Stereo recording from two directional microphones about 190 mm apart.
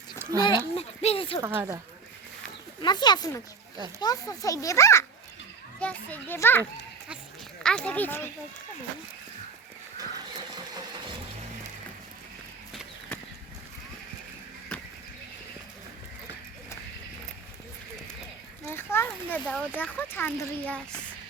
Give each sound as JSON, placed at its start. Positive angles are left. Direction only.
{"t": 0.2, "sound": "a sound", "side_deg": -15}
{"t": 0.4, "sound": "speech", "side_deg": 30}
{"t": 1.5, "sound": "speech", "side_deg": -10}
{"t": 2.8, "sound": "speech", "side_deg": 25}
{"t": 14.7, "sound": "a sound", "side_deg": 5}
{"t": 18.7, "sound": "speech", "side_deg": 10}